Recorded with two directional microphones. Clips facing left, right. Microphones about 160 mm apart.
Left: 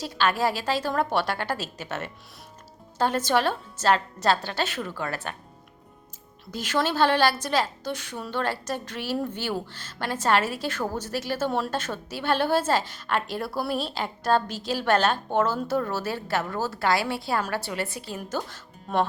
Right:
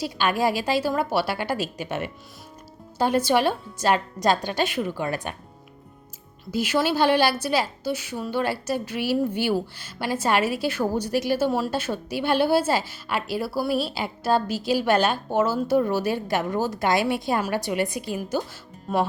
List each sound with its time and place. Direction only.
0.0 s a woman's voice: 15° right (ahead or behind)
6.5 s a woman's voice: 10° right (ahead or behind)